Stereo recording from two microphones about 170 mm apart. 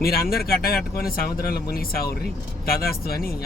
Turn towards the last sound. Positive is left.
turn(degrees=65)  # may be behind; listen again after turning